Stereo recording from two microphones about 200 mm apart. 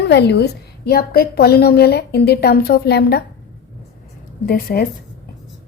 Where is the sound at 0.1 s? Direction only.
55° left (ahead or behind).